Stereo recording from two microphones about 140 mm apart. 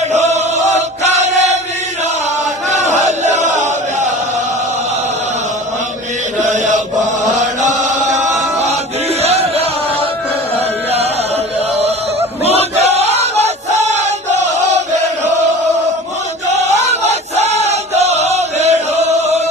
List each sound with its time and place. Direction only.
0.1 s chant: 55° right (ahead or behind)
0.8 s choir: 55° right (ahead or behind)
2.6 s chant: 55° right (ahead or behind)
6.5 s chant: 60° right (ahead or behind)
12.4 s a sound: 50° right (ahead or behind)
14.5 s chant: 55° right (ahead or behind)
16.5 s a sound: 55° right (ahead or behind)
17.7 s chant: 50° right (ahead or behind)